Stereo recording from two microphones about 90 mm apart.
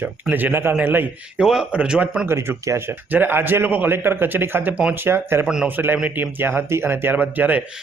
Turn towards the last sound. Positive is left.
turn(degrees=-20)  # may be behind; listen again after turning